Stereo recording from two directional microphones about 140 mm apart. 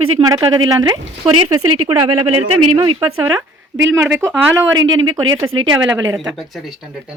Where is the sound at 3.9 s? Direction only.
10° right (ahead or behind).